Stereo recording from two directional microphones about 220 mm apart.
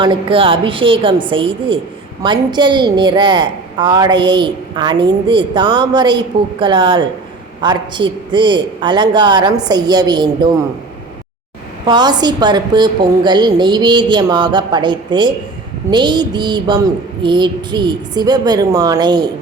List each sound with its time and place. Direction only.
0.0 s a woman's voice: 20° right (ahead or behind)
11.9 s a woman's voice: 20° right (ahead or behind)